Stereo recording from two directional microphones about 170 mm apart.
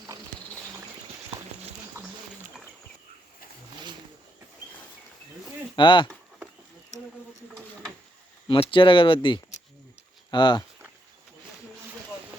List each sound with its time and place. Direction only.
2.0 s dog: 15° right (ahead or behind)
5.7 s speech: 30° left (ahead or behind)
8.4 s speech: 30° left (ahead or behind)